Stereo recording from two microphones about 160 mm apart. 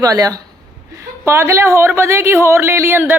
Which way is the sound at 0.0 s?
20° right (ahead or behind).